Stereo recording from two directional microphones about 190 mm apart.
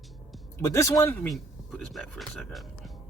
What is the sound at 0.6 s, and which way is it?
Speech, 15° left (ahead or behind).